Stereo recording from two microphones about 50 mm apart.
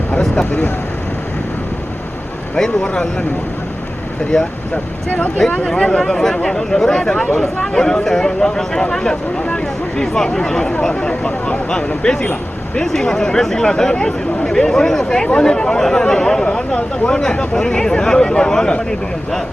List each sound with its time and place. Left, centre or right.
2.8 s speech: centre